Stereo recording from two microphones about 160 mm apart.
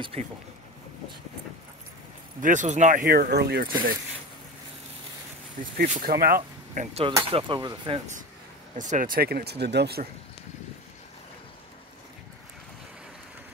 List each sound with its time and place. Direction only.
0.0 s speech: 35° right (ahead or behind)
2.4 s speech: 50° right (ahead or behind); by 3.7 s 75° right (ahead or behind)
5.6 s speech: 60° right (ahead or behind); by 8.0 s 30° right (ahead or behind)
8.7 s speech: 50° right (ahead or behind); by 10.0 s 90° right